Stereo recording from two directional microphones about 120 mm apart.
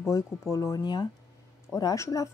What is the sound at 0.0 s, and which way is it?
A woman's voice, 25° left (ahead or behind).